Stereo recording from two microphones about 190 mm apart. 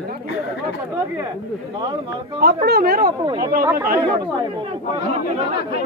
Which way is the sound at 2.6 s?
55° right (ahead or behind).